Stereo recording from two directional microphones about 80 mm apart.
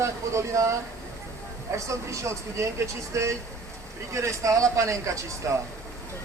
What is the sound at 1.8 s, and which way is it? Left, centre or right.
Speech, right.